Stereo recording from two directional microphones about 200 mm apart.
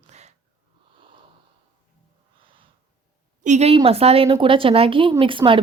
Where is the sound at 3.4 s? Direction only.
35° right (ahead or behind).